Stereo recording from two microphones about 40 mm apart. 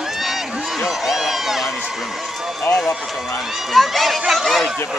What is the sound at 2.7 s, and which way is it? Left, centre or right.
Speech, left.